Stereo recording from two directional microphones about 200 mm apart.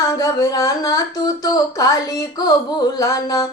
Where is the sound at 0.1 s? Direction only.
15° left (ahead or behind).